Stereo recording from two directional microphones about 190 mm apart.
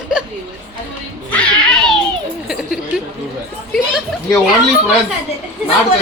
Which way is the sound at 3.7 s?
Centre (ahead or behind).